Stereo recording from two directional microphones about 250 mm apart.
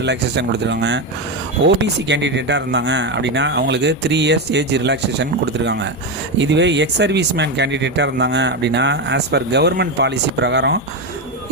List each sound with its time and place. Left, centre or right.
0.0 s speech: right